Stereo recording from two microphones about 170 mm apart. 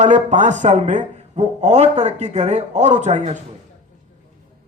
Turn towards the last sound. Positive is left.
turn(degrees=-45)  # may be behind; listen again after turning